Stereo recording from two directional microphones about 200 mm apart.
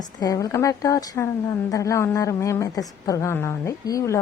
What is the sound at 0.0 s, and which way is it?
A woman's voice, 20° left (ahead or behind).